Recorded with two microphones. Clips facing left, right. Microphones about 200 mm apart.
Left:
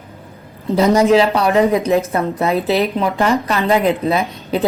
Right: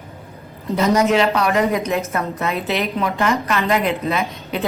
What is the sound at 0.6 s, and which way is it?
A woman's voice, 30° left (ahead or behind).